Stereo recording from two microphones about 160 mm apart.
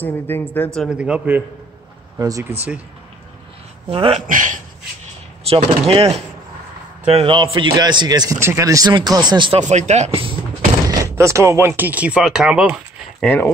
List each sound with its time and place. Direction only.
0.0 s a woman's voice: 15° left (ahead or behind)
0.7 s speech: 5° right (ahead or behind)
2.1 s speech: 20° right (ahead or behind)
3.9 s speech: 35° right (ahead or behind)
4.3 s speech: 55° right (ahead or behind)
5.5 s a man's voice: 40° right (ahead or behind)
9.7 s speech: 45° right (ahead or behind)
10.9 s speech: 20° right (ahead or behind)
13.2 s a woman's voice: 10° left (ahead or behind)